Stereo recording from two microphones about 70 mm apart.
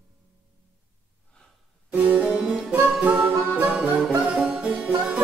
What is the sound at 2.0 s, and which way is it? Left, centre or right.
Harpsichord, centre.